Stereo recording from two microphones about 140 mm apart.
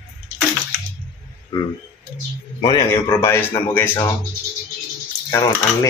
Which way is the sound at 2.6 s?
30° left (ahead or behind).